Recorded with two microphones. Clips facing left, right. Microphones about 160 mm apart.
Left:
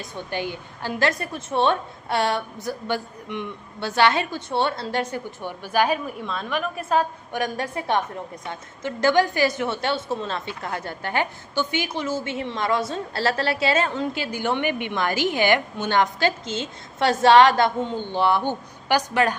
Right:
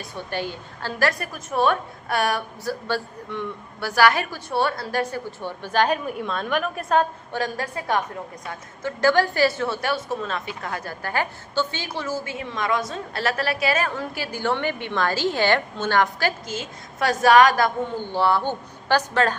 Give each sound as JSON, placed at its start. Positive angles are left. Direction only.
{"t": 0.0, "sound": "a woman's voice", "side_deg": 15}
{"t": 7.3, "sound": "a woman's voice", "side_deg": 20}